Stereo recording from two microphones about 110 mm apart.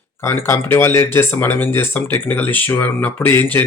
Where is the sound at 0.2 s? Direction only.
25° left (ahead or behind).